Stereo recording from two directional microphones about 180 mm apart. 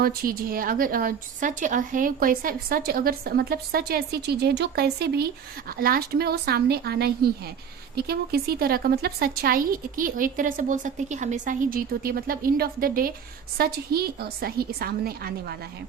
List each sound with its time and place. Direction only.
0.0 s a woman's voice: 55° right (ahead or behind)